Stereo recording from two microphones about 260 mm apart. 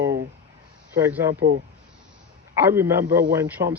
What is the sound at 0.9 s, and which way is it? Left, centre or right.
Speech, centre.